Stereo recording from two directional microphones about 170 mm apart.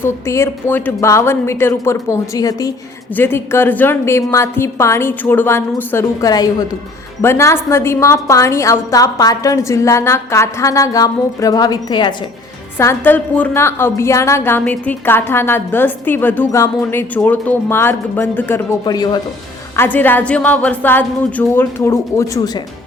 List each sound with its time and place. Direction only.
0.0 s a woman's voice: 15° left (ahead or behind)
12.7 s a woman's voice: 15° left (ahead or behind)
19.7 s a woman's voice: 10° left (ahead or behind)